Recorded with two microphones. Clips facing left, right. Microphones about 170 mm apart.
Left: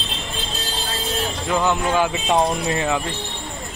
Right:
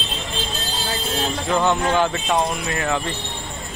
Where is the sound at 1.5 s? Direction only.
Centre (ahead or behind).